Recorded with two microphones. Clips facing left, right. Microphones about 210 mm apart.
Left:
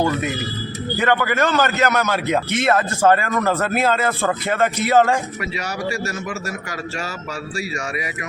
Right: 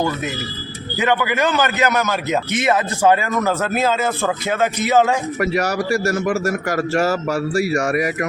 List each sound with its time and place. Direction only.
0.9 s a man's voice: 5° right (ahead or behind)
5.4 s a man's voice: 65° right (ahead or behind)